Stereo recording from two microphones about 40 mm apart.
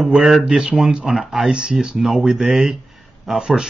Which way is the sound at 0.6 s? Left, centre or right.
Centre.